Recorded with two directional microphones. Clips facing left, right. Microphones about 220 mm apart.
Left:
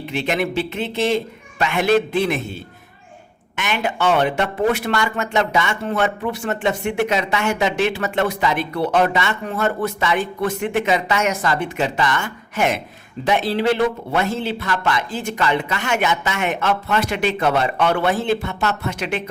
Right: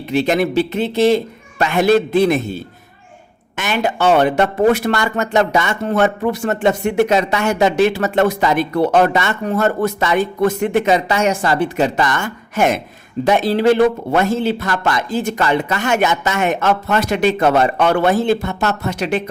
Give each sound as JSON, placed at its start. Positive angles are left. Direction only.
{"t": 0.1, "sound": "speech", "side_deg": -40}